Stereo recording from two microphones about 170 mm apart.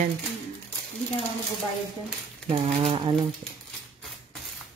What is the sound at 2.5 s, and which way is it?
Speech, 35° right (ahead or behind).